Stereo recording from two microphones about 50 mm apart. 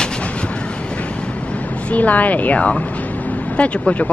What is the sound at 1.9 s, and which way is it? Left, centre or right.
A woman's voice, left.